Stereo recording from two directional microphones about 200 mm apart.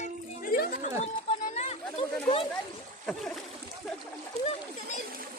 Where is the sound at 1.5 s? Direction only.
30° left (ahead or behind).